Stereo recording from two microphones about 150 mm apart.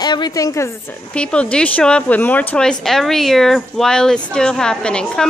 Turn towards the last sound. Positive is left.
turn(degrees=5)  # may be behind; listen again after turning